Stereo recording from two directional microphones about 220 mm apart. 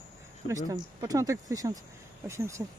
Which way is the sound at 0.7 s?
15° right (ahead or behind).